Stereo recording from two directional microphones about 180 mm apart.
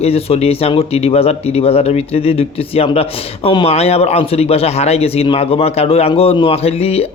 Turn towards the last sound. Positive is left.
turn(degrees=35)  # may be behind; listen again after turning